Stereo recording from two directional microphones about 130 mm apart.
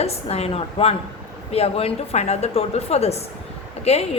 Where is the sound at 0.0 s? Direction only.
50° left (ahead or behind).